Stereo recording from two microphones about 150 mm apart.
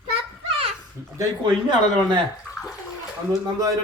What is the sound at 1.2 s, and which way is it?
Speech, 30° right (ahead or behind).